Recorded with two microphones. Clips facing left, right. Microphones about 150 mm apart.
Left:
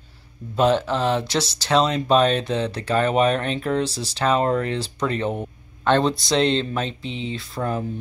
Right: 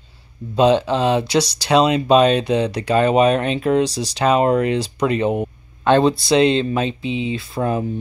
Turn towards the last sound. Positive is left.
turn(degrees=-15)  # may be behind; listen again after turning